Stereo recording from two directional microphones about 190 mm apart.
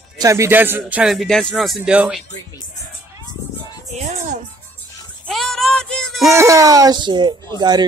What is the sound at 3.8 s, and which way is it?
Music, 35° right (ahead or behind).